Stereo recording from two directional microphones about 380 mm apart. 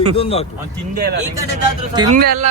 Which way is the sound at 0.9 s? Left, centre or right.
Right.